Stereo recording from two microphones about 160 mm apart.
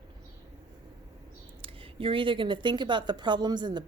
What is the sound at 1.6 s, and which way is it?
Speech, 35° right (ahead or behind).